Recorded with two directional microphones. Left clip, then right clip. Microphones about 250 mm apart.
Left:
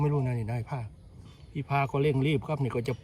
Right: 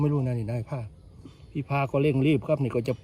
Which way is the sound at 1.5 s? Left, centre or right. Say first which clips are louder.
Right 2 dB; centre.